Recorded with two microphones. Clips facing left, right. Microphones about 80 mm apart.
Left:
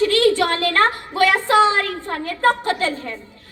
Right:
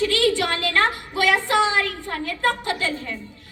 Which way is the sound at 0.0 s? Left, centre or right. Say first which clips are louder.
Left 4 dB; left.